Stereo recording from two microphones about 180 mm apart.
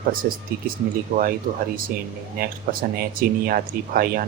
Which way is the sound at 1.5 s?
35° right (ahead or behind).